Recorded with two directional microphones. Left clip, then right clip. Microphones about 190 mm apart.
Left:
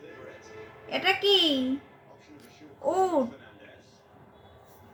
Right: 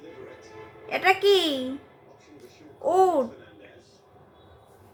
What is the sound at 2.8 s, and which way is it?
Speech, 30° right (ahead or behind).